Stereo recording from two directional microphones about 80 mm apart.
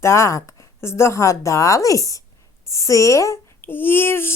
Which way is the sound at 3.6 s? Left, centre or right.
Left.